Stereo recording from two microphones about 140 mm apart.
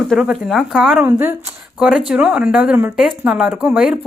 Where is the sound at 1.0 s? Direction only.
15° right (ahead or behind).